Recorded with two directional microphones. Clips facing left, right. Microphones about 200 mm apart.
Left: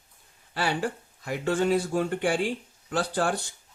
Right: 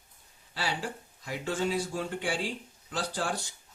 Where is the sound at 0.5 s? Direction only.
55° left (ahead or behind).